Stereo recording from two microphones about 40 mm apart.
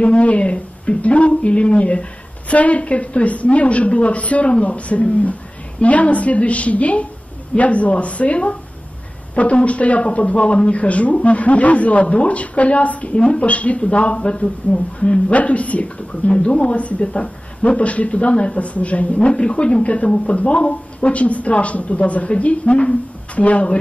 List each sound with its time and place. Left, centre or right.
0.0 s speech: left